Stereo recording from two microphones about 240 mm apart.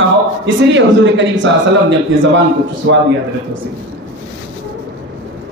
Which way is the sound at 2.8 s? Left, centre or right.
Right.